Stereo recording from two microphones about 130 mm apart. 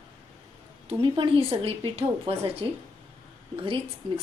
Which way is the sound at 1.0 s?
40° right (ahead or behind).